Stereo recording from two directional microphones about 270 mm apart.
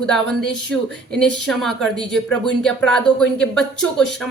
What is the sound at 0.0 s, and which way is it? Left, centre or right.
Speech, centre.